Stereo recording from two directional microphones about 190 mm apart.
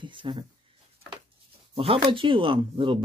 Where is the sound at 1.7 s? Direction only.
30° right (ahead or behind).